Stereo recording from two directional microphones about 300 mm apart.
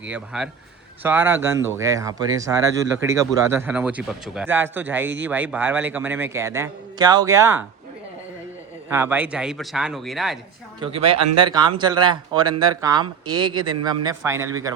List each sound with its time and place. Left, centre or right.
0.1 s speech: centre
8.9 s speech: centre
10.8 s speech: centre